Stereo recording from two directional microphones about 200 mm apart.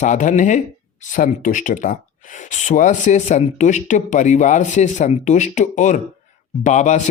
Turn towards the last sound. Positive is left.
turn(degrees=35)  # may be behind; listen again after turning